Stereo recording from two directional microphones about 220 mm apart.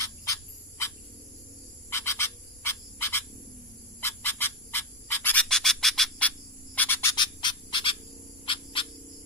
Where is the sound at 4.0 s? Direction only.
10° left (ahead or behind).